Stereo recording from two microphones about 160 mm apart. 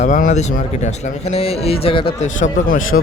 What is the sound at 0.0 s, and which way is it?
Speech, 50° left (ahead or behind).